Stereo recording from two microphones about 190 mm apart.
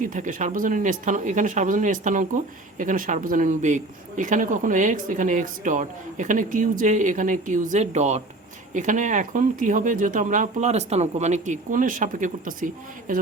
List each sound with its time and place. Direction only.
0.0 s speech: 45° right (ahead or behind)